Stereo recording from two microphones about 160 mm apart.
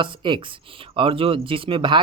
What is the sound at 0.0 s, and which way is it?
Speech, 30° right (ahead or behind).